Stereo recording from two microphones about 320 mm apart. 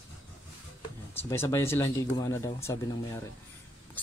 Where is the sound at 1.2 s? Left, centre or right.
Centre.